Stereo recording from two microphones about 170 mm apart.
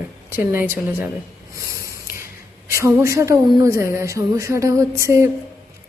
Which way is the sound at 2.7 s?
15° right (ahead or behind).